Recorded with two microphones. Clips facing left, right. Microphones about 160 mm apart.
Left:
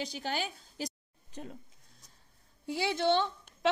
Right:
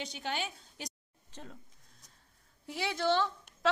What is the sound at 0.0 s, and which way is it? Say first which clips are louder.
Speech: left 2 dB; 35° left (ahead or behind).